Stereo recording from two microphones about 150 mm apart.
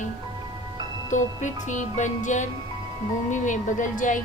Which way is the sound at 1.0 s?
55° left (ahead or behind).